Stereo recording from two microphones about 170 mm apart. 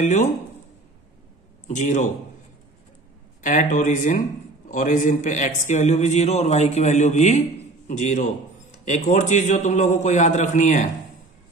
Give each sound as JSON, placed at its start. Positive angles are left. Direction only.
{"t": 0.0, "sound": "a man's voice", "side_deg": 45}
{"t": 1.7, "sound": "a man's voice", "side_deg": 45}
{"t": 3.4, "sound": "a man's voice", "side_deg": 50}